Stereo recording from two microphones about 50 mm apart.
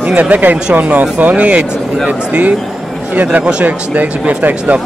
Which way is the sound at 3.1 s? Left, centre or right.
Right.